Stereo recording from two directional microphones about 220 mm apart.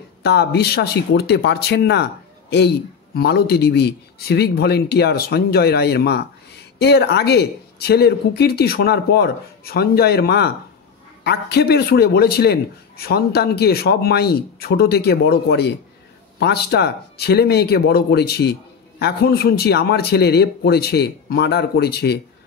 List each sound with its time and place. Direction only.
0.2 s speech: 50° left (ahead or behind)
3.2 s speech: 45° left (ahead or behind)